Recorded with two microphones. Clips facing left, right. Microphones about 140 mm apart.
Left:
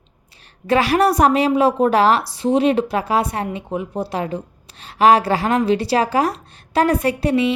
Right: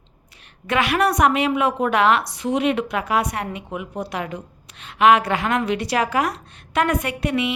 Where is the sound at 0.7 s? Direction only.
35° left (ahead or behind).